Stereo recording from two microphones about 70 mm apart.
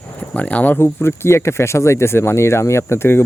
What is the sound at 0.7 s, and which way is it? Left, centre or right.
Speech, left.